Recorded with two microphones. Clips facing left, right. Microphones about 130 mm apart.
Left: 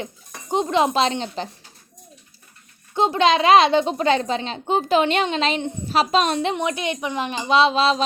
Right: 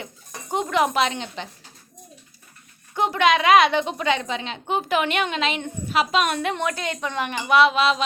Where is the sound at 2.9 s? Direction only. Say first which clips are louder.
Left 2 dB; 25° left (ahead or behind).